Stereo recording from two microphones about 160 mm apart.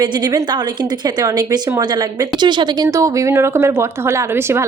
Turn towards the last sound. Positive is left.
turn(degrees=-15)  # may be behind; listen again after turning